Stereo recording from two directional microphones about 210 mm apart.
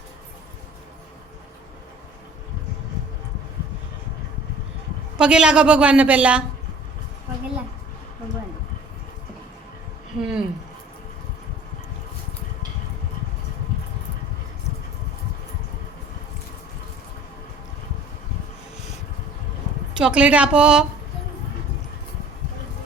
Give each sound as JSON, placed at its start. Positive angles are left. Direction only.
{"t": 5.1, "sound": "a woman's voice", "side_deg": -5}
{"t": 10.2, "sound": "a sound", "side_deg": 0}
{"t": 20.0, "sound": "a woman's voice", "side_deg": -5}